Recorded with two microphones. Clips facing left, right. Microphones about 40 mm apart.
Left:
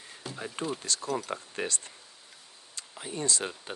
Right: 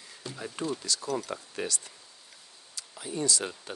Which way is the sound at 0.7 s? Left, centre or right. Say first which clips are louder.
Even; left.